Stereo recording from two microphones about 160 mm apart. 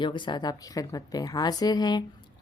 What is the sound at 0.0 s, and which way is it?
A woman's voice, 30° left (ahead or behind).